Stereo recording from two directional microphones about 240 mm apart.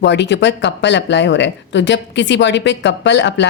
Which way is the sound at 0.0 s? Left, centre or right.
Left.